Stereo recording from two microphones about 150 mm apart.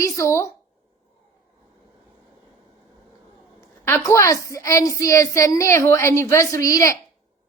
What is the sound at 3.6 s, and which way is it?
A woman's voice, 20° left (ahead or behind).